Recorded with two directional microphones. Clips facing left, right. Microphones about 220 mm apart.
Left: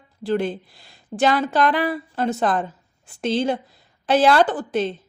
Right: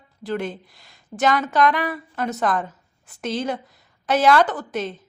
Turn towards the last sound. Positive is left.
turn(degrees=30)  # may be behind; listen again after turning